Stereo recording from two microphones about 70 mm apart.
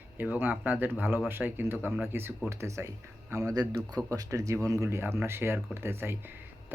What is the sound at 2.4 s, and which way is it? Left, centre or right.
Speech, right.